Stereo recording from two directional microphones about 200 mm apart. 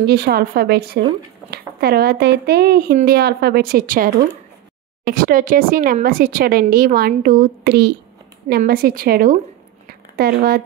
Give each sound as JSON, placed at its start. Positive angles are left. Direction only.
{"t": 0.0, "sound": "speech", "side_deg": -55}